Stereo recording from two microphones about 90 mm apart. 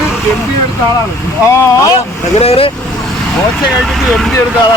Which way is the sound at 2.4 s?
90° left.